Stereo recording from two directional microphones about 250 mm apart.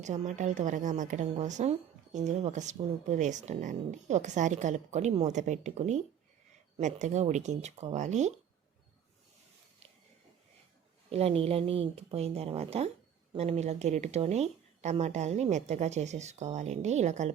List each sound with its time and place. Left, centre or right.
0.0 s speech: right
11.1 s speech: right